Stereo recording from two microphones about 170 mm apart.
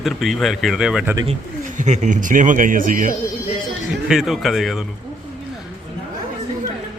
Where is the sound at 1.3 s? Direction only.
45° right (ahead or behind).